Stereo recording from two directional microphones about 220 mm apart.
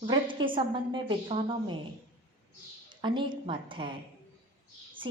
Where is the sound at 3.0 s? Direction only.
20° right (ahead or behind).